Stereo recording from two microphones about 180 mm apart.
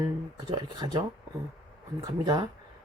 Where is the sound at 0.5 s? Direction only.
25° right (ahead or behind).